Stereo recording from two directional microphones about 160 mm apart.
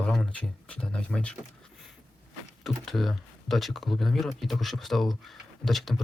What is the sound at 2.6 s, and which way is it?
Speech, centre (ahead or behind).